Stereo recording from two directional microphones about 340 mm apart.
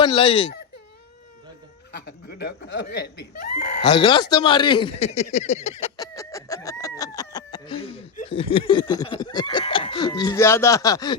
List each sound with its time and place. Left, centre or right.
0.0 s speech: centre
2.2 s speech: left
3.8 s speech: centre
6.0 s a sound: centre
8.5 s speech: centre